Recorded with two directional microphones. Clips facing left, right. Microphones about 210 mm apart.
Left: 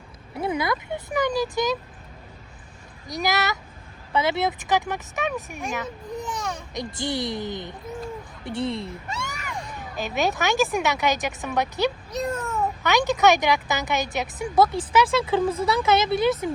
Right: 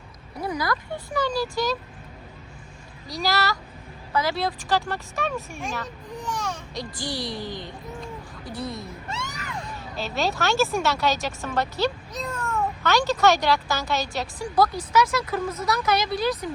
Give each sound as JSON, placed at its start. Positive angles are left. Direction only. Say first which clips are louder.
{"t": 0.3, "sound": "a woman's voice", "louder": "left 2 dB", "side_deg": 25}
{"t": 3.1, "sound": "a woman's voice", "louder": "even", "side_deg": 20}
{"t": 9.7, "sound": "a woman's voice", "louder": "left 2 dB", "side_deg": 15}